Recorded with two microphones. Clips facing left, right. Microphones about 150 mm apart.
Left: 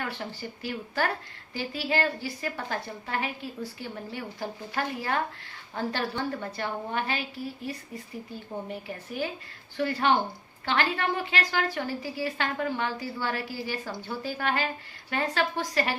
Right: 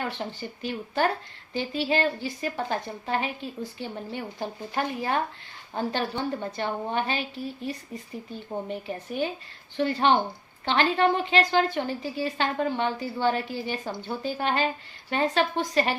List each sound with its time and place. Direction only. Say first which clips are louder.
0.0 s a woman's voice: right 3 dB; 20° right (ahead or behind)
8.7 s a woman's voice: right 4 dB; 25° right (ahead or behind)